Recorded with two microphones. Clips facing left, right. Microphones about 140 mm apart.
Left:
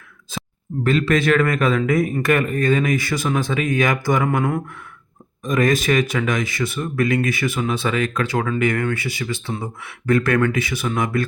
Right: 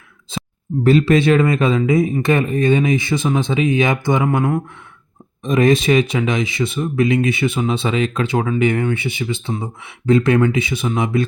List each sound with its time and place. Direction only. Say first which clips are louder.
0.3 s a sound: right 3 dB; 25° right (ahead or behind)
0.9 s speech: right 5 dB; 30° right (ahead or behind); by 4.6 s 15° right (ahead or behind)
5.4 s speech: right 4 dB; 25° right (ahead or behind)